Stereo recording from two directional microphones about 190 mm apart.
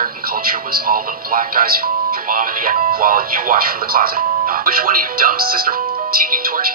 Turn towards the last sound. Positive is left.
turn(degrees=-50)  # may be behind; listen again after turning